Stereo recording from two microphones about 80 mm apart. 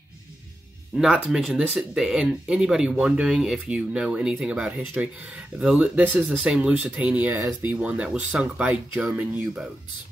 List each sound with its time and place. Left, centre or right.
0.9 s speech: centre
6.3 s speech: centre